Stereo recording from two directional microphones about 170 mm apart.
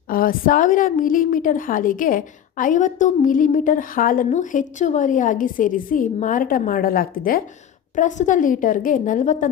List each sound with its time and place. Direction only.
0.1 s a woman's voice: 55° left (ahead or behind)
7.9 s a woman's voice: 45° left (ahead or behind)